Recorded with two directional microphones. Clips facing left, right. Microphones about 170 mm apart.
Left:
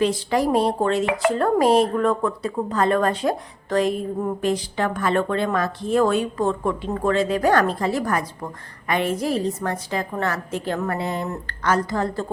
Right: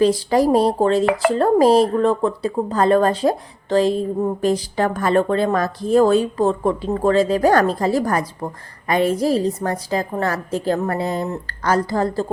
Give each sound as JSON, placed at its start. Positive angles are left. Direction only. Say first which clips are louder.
{"t": 0.0, "sound": "a woman's voice", "louder": "right 5 dB", "side_deg": -35}